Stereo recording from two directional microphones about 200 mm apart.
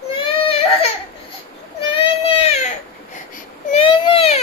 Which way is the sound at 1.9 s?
30° left (ahead or behind).